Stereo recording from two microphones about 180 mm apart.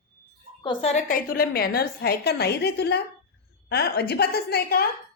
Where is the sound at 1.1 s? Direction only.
55° left (ahead or behind).